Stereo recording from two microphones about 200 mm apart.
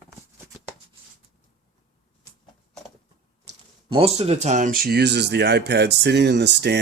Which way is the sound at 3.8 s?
30° right (ahead or behind).